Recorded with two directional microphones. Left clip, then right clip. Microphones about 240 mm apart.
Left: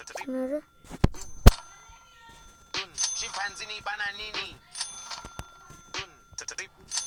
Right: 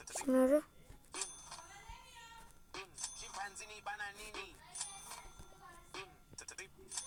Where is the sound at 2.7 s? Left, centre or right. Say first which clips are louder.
Left 17 dB; left.